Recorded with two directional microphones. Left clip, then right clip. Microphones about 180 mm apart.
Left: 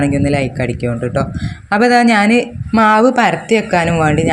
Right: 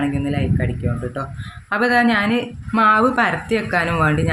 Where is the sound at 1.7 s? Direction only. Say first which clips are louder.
Left 6 dB; 30° left (ahead or behind).